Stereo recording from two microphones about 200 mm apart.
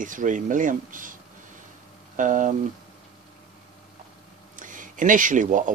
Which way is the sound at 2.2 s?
40° right (ahead or behind).